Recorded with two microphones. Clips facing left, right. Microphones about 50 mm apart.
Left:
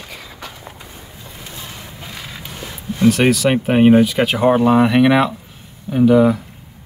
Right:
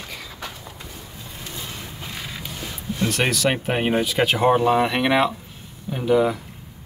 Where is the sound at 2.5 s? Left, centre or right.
Centre.